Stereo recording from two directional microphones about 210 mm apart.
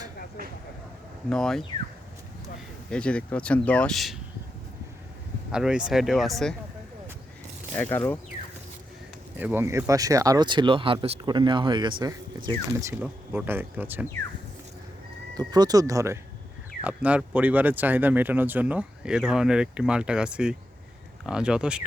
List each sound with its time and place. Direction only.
1.3 s speech: centre (ahead or behind)
2.9 s speech: 5° left (ahead or behind)
5.5 s speech: 5° right (ahead or behind)
7.8 s speech: 10° left (ahead or behind)
9.4 s speech: 10° right (ahead or behind)
15.4 s speech: 20° right (ahead or behind)